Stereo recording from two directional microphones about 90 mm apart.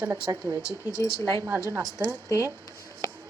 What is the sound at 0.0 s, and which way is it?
Speech, 30° right (ahead or behind).